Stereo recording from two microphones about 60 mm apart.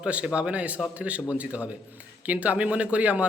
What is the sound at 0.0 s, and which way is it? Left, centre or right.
Speech, right.